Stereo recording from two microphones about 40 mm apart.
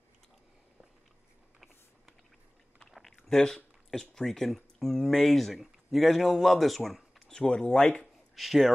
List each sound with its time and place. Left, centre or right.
2.9 s chewing: centre
4.0 s a man's voice: centre
7.4 s speech: left
8.4 s a man's voice: centre